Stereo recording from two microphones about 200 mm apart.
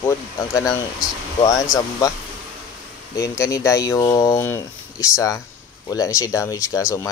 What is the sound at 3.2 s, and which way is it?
Speech, 15° left (ahead or behind).